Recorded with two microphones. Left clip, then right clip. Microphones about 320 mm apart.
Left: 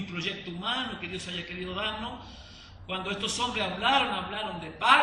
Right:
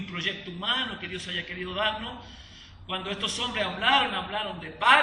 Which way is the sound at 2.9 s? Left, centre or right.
Centre.